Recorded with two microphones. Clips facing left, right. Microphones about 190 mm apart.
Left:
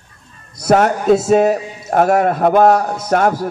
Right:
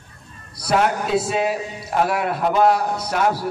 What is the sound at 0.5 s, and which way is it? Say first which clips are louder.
A man's voice: left 6 dB; 45° left (ahead or behind).